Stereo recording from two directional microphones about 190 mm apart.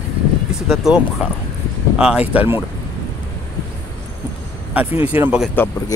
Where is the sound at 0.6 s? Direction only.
Centre (ahead or behind).